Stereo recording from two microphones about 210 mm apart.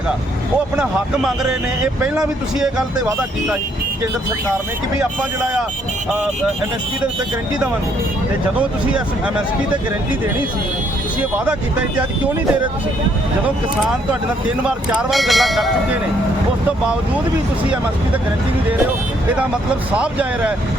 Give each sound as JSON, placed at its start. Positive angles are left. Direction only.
{"t": 0.8, "sound": "speech", "side_deg": -5}
{"t": 4.9, "sound": "speech", "side_deg": -5}
{"t": 14.8, "sound": "speech", "side_deg": -5}
{"t": 20.0, "sound": "speech", "side_deg": -5}